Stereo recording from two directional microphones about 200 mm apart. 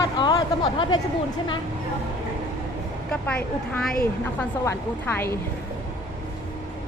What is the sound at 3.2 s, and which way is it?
Speech, 10° left (ahead or behind).